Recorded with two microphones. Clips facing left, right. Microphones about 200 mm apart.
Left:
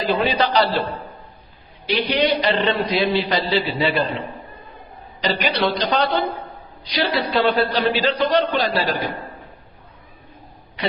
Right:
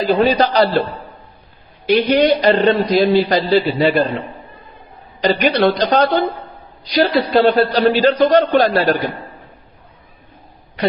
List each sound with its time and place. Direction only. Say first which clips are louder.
0.3 s a man's voice: right 5 dB; 40° right (ahead or behind)
1.9 s a man's voice: right 7 dB; 45° right (ahead or behind)
5.2 s a man's voice: right 7 dB; 50° right (ahead or behind)
10.8 s a man's voice: right 6 dB; 45° right (ahead or behind)